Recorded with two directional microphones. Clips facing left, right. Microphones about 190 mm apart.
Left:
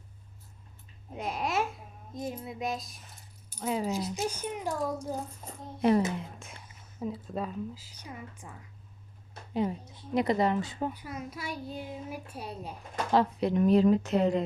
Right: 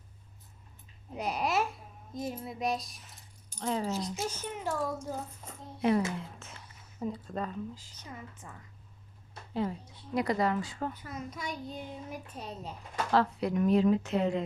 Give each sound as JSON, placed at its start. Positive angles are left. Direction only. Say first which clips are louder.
{"t": 1.1, "sound": "a child's voice", "louder": "right 1 dB", "side_deg": 0}
{"t": 5.4, "sound": "a sound", "louder": "left 3 dB", "side_deg": 35}
{"t": 6.0, "sound": "speech", "louder": "left 3 dB", "side_deg": 20}
{"t": 7.0, "sound": "a woman's voice", "louder": "left 1 dB", "side_deg": 5}